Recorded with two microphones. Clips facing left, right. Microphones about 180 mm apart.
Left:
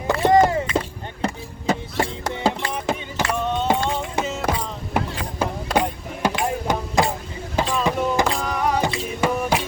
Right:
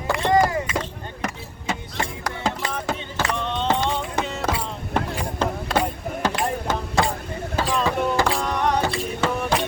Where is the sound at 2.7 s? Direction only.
10° left (ahead or behind).